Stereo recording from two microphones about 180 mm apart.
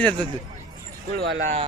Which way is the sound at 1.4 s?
40° right (ahead or behind).